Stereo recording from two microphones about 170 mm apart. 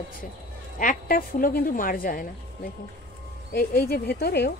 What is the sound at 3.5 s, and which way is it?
Speech, 60° left (ahead or behind).